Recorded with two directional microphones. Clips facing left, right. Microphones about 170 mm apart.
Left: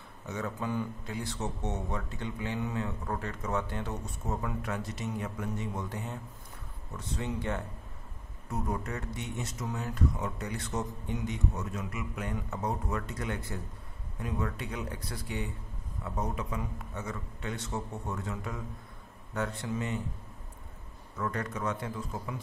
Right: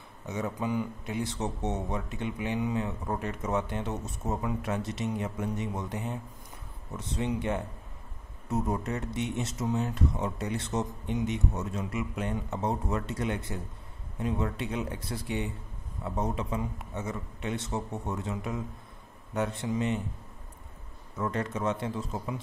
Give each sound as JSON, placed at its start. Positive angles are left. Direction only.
{"t": 0.3, "sound": "a man's voice", "side_deg": -15}
{"t": 21.2, "sound": "a man's voice", "side_deg": -25}